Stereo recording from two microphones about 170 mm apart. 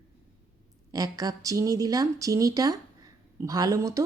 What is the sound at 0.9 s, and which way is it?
Speech, 20° right (ahead or behind).